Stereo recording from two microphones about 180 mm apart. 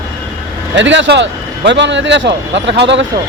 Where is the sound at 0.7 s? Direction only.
90° right; by 3.0 s 75° right (ahead or behind).